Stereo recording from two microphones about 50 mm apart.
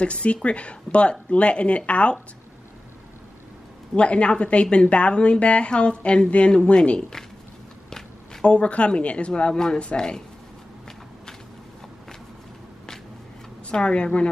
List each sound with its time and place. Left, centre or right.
0.0 s a woman's voice: left
3.9 s a woman's voice: left
13.7 s a woman's voice: left